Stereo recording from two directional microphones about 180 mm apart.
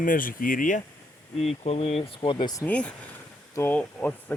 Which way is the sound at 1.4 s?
35° left (ahead or behind).